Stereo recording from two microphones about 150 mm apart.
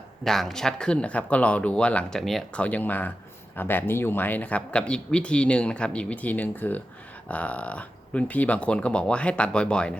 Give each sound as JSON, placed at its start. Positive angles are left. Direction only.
{"t": 0.3, "sound": "speech", "side_deg": 0}